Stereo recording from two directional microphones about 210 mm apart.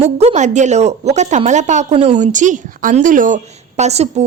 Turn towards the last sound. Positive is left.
turn(degrees=-30)  # may be behind; listen again after turning